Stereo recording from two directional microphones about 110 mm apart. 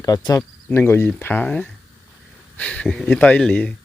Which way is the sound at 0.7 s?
20° left (ahead or behind).